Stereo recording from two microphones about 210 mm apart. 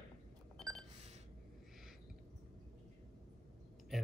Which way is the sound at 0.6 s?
5° left (ahead or behind).